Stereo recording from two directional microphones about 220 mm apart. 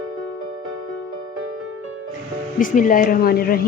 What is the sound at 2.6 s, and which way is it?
Speech, 35° left (ahead or behind).